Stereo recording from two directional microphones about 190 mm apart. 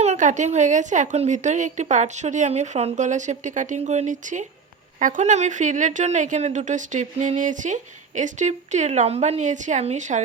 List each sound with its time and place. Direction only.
0.0 s a woman's voice: 40° right (ahead or behind)